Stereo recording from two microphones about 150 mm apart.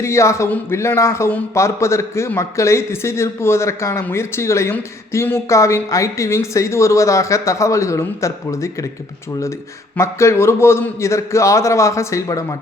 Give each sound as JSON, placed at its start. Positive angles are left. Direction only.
{"t": 0.0, "sound": "a man's voice", "side_deg": 20}
{"t": 10.0, "sound": "a man's voice", "side_deg": 20}